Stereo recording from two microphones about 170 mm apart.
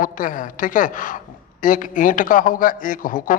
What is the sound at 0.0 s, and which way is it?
Speech, 50° left (ahead or behind).